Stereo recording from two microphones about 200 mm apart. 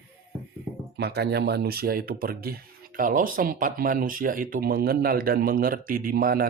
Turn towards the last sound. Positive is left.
turn(degrees=-45)  # may be behind; listen again after turning